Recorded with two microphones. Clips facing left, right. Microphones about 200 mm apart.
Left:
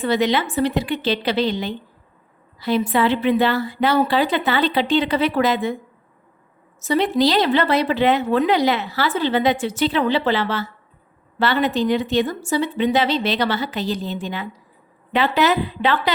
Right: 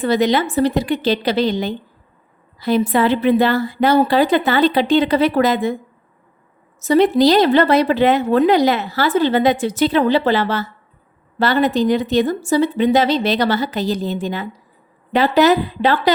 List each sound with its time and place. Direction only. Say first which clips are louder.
0.0 s speech: right 3 dB; 40° right (ahead or behind)
6.8 s speech: right 5 dB; 45° right (ahead or behind)